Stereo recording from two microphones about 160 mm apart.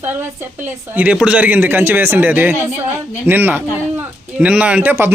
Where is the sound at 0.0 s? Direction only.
15° right (ahead or behind).